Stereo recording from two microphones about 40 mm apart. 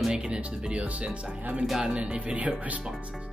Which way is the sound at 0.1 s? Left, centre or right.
Right.